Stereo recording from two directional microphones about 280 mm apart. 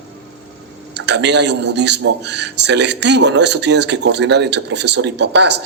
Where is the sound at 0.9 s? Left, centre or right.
Right.